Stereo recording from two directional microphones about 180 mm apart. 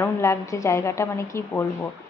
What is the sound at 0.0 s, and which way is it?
A woman's voice, 15° left (ahead or behind).